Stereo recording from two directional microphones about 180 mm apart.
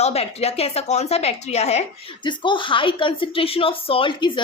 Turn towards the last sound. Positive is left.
turn(degrees=25)  # may be behind; listen again after turning